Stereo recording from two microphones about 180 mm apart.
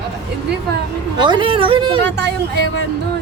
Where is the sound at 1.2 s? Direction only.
25° right (ahead or behind).